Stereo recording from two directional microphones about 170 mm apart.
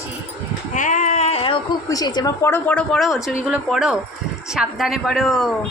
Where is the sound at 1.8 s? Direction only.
20° left (ahead or behind).